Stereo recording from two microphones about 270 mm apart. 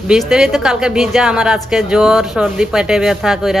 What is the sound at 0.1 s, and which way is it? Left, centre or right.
Speech, centre.